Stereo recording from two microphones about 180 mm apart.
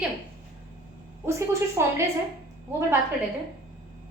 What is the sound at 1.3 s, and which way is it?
Speech, 15° right (ahead or behind).